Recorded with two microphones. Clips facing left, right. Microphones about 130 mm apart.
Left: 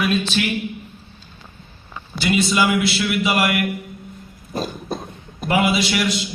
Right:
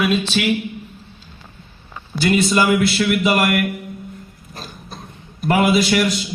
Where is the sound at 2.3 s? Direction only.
45° right (ahead or behind).